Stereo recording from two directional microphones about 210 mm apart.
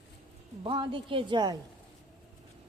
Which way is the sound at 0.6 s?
25° right (ahead or behind).